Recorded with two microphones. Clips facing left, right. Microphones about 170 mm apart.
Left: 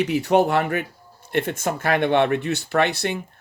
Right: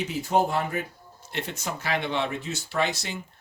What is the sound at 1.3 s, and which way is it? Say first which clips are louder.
Speech: left 9 dB; 55° left (ahead or behind).